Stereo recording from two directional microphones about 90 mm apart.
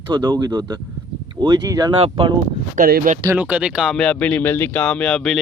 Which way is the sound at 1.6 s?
40° right (ahead or behind).